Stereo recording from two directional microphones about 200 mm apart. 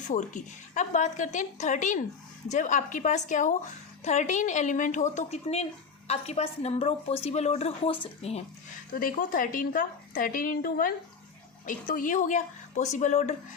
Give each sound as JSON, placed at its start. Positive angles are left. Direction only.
{"t": 0.1, "sound": "a woman's voice", "side_deg": 40}
{"t": 8.9, "sound": "a woman's voice", "side_deg": 45}